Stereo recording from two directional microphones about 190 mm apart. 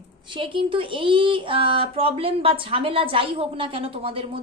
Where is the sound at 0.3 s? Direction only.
25° right (ahead or behind).